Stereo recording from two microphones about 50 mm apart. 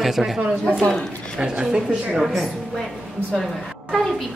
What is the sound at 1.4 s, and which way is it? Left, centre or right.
Speech, centre.